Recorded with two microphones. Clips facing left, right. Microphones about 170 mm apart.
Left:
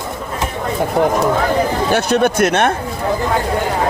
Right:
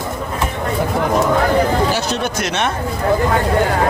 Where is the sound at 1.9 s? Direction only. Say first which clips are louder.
Left 6 dB; 55° left (ahead or behind).